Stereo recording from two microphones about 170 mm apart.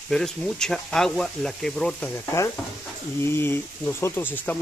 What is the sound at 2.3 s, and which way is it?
Speech, 15° left (ahead or behind).